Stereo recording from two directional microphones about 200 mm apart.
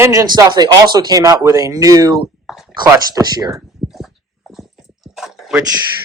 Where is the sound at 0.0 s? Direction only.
15° right (ahead or behind).